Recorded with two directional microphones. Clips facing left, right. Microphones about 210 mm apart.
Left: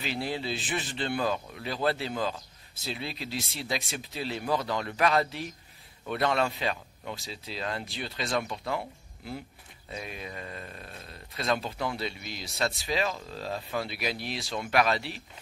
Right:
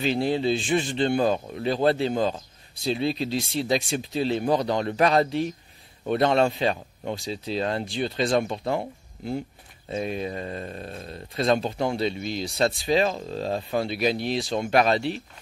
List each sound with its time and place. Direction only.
0.0 s speech: 25° right (ahead or behind)